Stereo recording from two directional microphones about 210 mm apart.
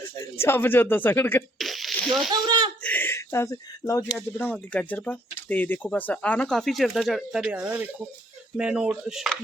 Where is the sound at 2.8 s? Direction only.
10° left (ahead or behind).